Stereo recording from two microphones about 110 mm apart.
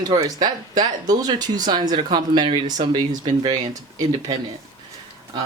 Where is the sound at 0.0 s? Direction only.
35° right (ahead or behind).